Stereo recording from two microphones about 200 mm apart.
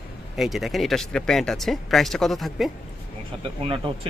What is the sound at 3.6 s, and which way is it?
Speech, 25° right (ahead or behind).